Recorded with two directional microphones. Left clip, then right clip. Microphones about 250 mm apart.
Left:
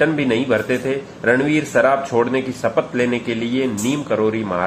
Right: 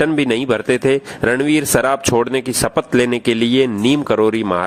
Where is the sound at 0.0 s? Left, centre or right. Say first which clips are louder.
Right 1 dB; right.